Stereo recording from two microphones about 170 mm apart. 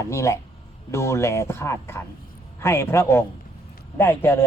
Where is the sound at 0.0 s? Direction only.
15° left (ahead or behind).